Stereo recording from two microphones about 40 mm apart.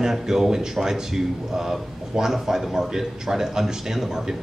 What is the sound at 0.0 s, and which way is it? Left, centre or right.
Speech, centre.